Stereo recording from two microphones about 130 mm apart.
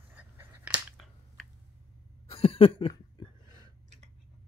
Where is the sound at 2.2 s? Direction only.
50° left (ahead or behind).